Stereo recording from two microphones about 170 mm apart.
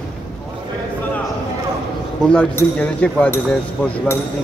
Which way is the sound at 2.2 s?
5° left (ahead or behind).